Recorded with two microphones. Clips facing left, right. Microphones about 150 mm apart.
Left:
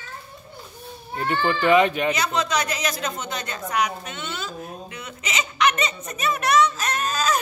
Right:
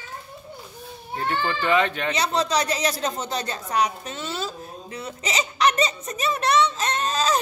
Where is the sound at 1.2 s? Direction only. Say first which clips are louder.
Left 3 dB; 15° left (ahead or behind).